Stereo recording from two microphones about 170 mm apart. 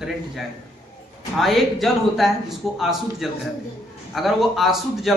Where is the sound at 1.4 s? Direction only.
Centre (ahead or behind).